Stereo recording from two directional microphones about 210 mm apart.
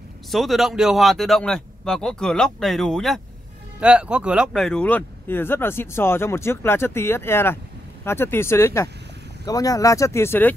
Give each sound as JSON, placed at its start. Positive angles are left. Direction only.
{"t": 0.3, "sound": "a man's voice", "side_deg": 0}